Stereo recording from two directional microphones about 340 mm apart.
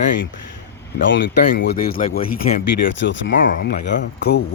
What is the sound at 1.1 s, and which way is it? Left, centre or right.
Speech, left.